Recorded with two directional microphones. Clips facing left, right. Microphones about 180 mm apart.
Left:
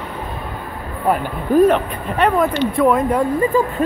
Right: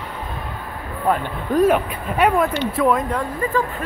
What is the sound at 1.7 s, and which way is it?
Speech, 10° right (ahead or behind).